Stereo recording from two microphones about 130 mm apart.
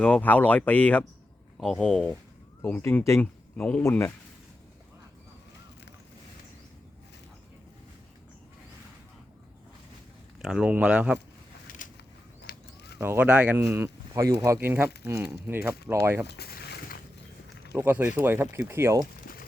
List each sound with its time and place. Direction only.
0.0 s speech: 10° left (ahead or behind)
2.6 s speech: 15° left (ahead or behind)
10.4 s speech: 5° right (ahead or behind)
13.0 s speech: 15° right (ahead or behind)
17.7 s speech: 15° right (ahead or behind)